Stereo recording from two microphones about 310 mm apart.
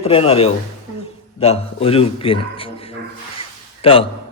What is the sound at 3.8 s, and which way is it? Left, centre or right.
Speech, centre.